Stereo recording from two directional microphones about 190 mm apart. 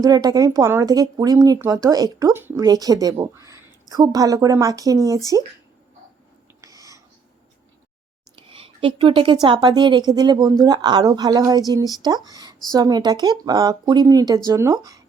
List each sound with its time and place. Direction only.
0.0 s speech: 20° right (ahead or behind)
6.6 s a sound: 20° right (ahead or behind)
8.4 s a woman's voice: 30° right (ahead or behind)